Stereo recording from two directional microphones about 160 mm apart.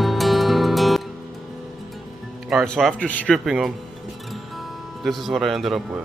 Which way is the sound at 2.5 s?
Centre (ahead or behind).